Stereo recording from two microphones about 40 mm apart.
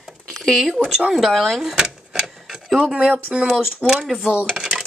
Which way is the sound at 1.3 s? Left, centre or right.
Centre.